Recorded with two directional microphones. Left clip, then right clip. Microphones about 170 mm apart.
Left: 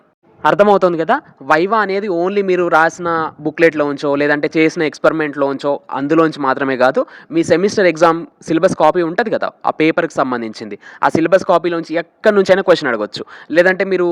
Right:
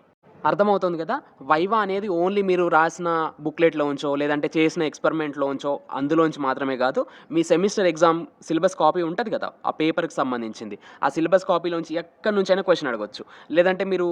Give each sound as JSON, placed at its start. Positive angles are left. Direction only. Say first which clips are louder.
{"t": 0.4, "sound": "speech", "louder": "left 9 dB", "side_deg": 35}
{"t": 1.5, "sound": "speech", "louder": "left 7 dB", "side_deg": 25}